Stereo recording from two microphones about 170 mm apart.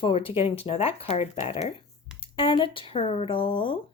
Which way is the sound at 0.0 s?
30° left (ahead or behind).